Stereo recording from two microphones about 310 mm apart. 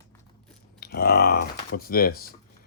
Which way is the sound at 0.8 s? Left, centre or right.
Left.